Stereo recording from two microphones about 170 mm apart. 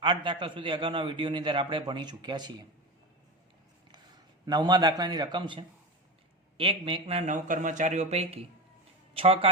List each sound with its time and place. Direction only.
0.0 s a man's voice: 30° right (ahead or behind)
4.4 s a man's voice: 25° right (ahead or behind)